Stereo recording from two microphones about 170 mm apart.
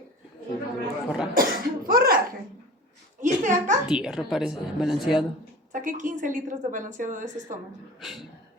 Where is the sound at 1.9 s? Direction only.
60° right (ahead or behind).